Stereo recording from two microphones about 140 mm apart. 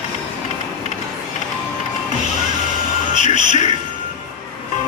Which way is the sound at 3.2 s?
55° left (ahead or behind).